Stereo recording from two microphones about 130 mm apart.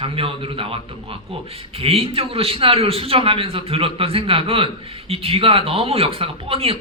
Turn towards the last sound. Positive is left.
turn(degrees=-45)  # may be behind; listen again after turning